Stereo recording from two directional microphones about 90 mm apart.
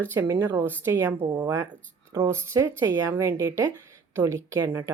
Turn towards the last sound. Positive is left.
turn(degrees=-35)  # may be behind; listen again after turning